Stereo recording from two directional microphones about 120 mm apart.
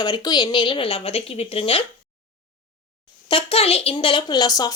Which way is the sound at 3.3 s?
50° left (ahead or behind).